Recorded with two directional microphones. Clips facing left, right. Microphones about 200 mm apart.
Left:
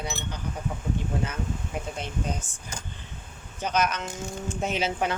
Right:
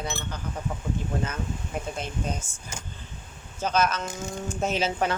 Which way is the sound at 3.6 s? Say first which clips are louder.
Right 2 dB; 15° left (ahead or behind).